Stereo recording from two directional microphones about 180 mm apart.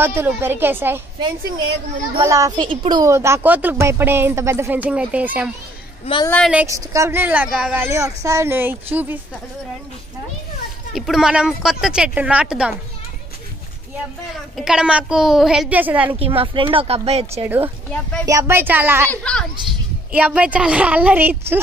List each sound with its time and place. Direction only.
0.0 s speech: 10° right (ahead or behind)
2.1 s speech: 20° right (ahead or behind)
6.2 s speech: 10° left (ahead or behind)
6.5 s speech: 15° right (ahead or behind)
11.0 s a woman's voice: centre (ahead or behind)
14.6 s a woman's voice: 5° right (ahead or behind)
16.2 s speech: 30° right (ahead or behind)
17.4 s speech: 10° right (ahead or behind)